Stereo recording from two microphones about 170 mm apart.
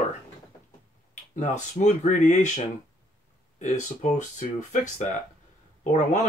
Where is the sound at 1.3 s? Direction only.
45° left (ahead or behind).